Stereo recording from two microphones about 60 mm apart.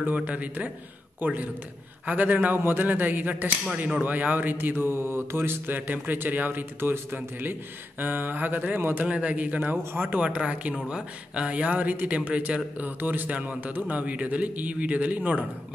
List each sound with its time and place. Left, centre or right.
0.0 s a man's voice: right
9.0 s a man's voice: right
10.2 s a man's voice: centre